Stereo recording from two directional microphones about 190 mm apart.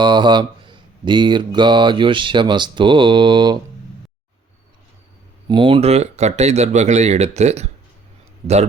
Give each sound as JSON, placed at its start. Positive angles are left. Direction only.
{"t": 0.0, "sound": "speech", "side_deg": -25}
{"t": 5.5, "sound": "speech", "side_deg": -25}